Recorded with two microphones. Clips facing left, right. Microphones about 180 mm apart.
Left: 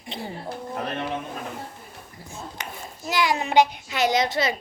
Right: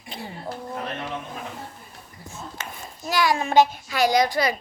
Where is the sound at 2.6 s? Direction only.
15° left (ahead or behind).